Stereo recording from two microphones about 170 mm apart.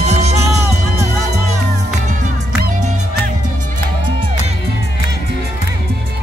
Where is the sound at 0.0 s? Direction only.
40° right (ahead or behind).